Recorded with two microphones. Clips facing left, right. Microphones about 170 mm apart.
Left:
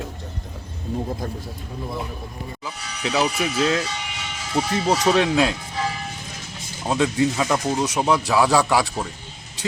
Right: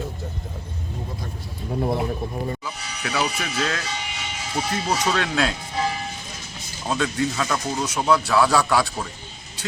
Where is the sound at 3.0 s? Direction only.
20° left (ahead or behind).